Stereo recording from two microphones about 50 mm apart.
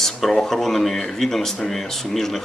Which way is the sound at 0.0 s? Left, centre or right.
Centre.